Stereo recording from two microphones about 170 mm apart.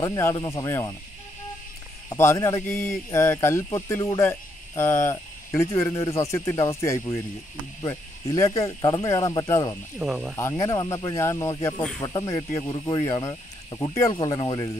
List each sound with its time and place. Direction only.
0.0 s speech: 20° left (ahead or behind)
2.1 s speech: 15° left (ahead or behind)
9.9 s speech: 5° right (ahead or behind)
10.3 s speech: 20° left (ahead or behind)